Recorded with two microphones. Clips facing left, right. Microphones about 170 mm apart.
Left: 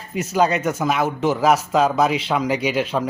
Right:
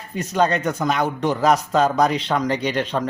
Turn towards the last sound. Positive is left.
turn(degrees=5)  # may be behind; listen again after turning